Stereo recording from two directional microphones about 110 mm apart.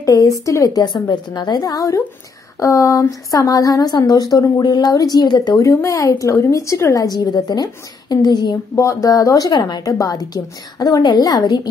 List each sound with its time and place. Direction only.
0.0 s a woman's voice: 30° left (ahead or behind)
8.7 s speech: 30° left (ahead or behind)
9.5 s a woman's voice: 45° left (ahead or behind)